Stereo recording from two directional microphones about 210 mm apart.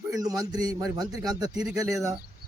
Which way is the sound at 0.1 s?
15° right (ahead or behind).